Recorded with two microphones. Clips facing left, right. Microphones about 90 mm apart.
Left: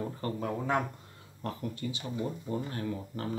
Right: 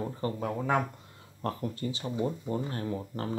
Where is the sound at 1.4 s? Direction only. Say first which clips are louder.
Right 3 dB; 40° right (ahead or behind).